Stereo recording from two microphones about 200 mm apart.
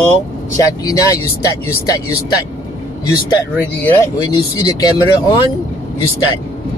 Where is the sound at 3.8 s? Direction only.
10° left (ahead or behind).